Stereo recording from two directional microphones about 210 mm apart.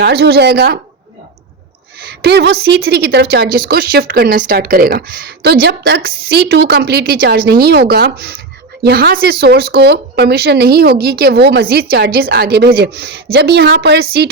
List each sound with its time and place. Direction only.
0.0 s a woman's voice: 50° right (ahead or behind)
2.2 s a woman's voice: 50° right (ahead or behind)